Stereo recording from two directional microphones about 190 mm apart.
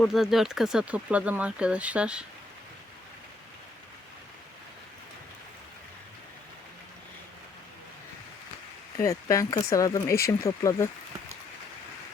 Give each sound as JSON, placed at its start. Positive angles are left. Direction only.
{"t": 0.0, "sound": "speech", "side_deg": 0}
{"t": 9.0, "sound": "speech", "side_deg": 15}